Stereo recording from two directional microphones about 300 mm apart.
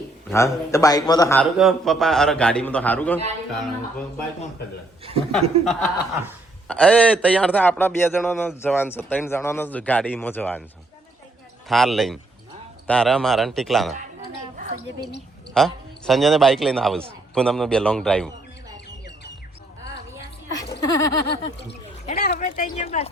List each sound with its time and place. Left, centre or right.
0.3 s a man's voice: centre
5.3 s a man's voice: centre
11.7 s a man's voice: centre
14.5 s a sound: right
15.5 s a man's voice: centre
20.8 s a man's voice: centre
22.0 s a sound: left